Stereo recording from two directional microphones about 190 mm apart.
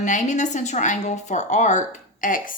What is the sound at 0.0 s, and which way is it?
A woman's voice, 40° left (ahead or behind).